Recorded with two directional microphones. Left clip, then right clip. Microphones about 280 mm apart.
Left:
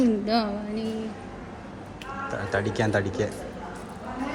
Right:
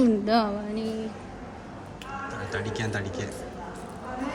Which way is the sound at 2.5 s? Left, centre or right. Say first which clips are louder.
Left 7 dB; centre.